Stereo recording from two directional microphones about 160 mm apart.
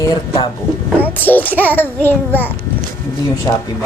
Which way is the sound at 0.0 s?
30° left (ahead or behind).